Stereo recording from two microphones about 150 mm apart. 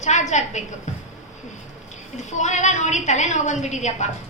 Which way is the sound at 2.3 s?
50° left (ahead or behind).